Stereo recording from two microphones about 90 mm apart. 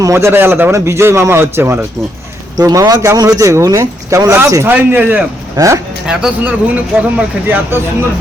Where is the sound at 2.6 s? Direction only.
45° right (ahead or behind).